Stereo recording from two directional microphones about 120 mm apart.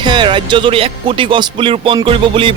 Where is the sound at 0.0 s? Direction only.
40° right (ahead or behind).